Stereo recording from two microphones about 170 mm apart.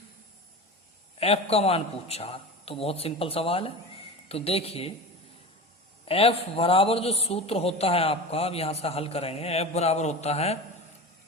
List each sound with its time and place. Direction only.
1.2 s a man's voice: 35° left (ahead or behind)
6.1 s a man's voice: 35° left (ahead or behind)